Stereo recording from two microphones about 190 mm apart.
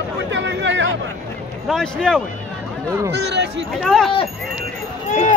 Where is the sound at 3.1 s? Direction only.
60° right (ahead or behind).